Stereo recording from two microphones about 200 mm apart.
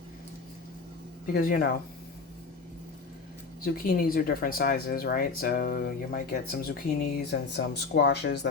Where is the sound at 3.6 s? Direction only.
45° left (ahead or behind).